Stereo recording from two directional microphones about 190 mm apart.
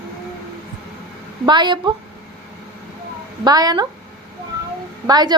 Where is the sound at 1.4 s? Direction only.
25° right (ahead or behind).